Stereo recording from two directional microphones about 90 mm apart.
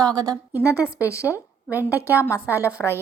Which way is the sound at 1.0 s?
35° left (ahead or behind).